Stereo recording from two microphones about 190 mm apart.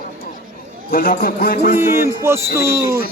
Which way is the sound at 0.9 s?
50° left (ahead or behind).